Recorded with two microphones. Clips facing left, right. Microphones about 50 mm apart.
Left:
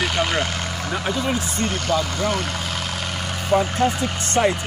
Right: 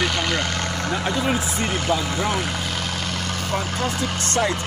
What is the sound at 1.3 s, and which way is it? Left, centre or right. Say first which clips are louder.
Speech: right 1 dB; centre.